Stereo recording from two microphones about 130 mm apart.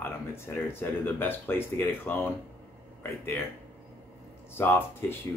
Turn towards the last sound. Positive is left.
turn(degrees=15)  # may be behind; listen again after turning